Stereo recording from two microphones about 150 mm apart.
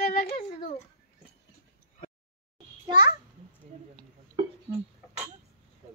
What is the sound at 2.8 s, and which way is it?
Speech, 30° right (ahead or behind).